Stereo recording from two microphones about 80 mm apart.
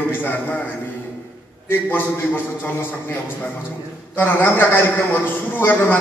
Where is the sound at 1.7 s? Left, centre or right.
Left.